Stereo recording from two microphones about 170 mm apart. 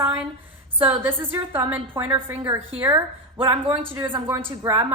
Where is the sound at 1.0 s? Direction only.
10° right (ahead or behind).